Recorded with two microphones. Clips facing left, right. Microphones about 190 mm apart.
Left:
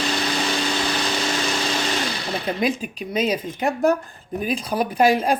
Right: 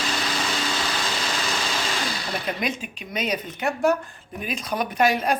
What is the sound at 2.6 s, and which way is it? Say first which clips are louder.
Speech: left 6 dB; 35° left (ahead or behind).